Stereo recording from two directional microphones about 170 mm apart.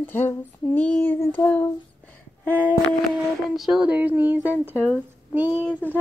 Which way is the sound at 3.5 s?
5° right (ahead or behind).